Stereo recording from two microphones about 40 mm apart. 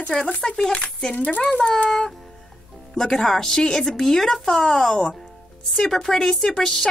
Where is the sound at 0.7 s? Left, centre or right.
Left.